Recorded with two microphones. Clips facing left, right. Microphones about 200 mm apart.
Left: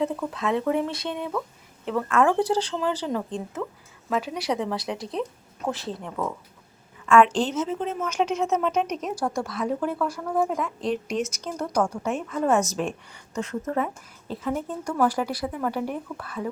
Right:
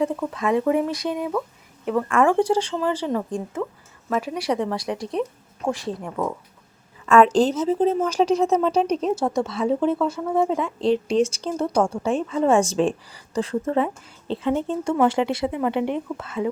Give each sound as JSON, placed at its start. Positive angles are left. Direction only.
{"t": 0.0, "sound": "a woman's voice", "side_deg": -5}
{"t": 2.4, "sound": "speech", "side_deg": -10}
{"t": 4.5, "sound": "a woman's voice", "side_deg": 5}
{"t": 5.6, "sound": "speech", "side_deg": -15}
{"t": 7.0, "sound": "a woman's voice", "side_deg": -40}